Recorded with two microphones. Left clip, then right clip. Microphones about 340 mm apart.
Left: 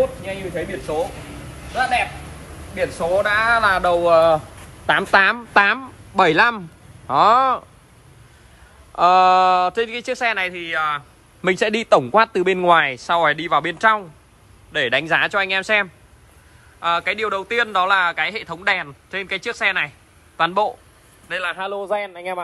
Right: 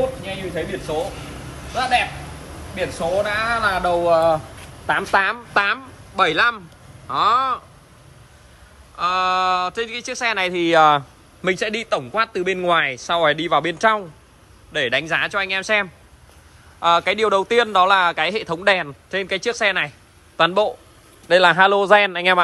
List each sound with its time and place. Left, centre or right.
0.2 s speech: centre
4.8 s speech: left
8.9 s speech: centre
11.4 s speech: centre
21.3 s a man's voice: centre